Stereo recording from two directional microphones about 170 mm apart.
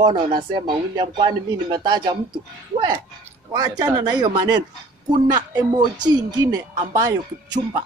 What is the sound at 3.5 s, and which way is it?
Speech, 25° right (ahead or behind).